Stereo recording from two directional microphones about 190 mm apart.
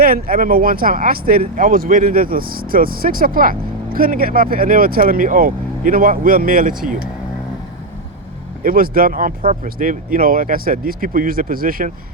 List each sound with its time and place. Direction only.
0.0 s speech: 50° right (ahead or behind)
8.6 s speech: 50° right (ahead or behind)